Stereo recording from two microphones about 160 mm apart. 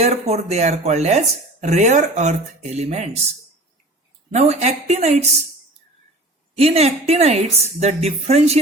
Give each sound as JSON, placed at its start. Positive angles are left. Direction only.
{"t": 0.0, "sound": "speech", "side_deg": -40}
{"t": 4.3, "sound": "speech", "side_deg": -45}
{"t": 6.6, "sound": "a woman's voice", "side_deg": -40}